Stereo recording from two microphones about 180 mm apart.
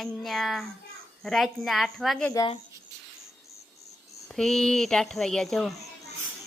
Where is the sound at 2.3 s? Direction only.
20° left (ahead or behind).